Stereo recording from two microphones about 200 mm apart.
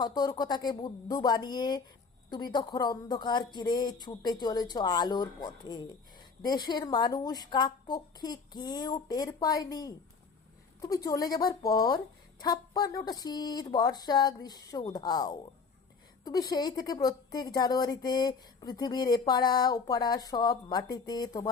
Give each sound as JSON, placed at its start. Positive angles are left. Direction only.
{"t": 0.0, "sound": "a woman's voice", "side_deg": 20}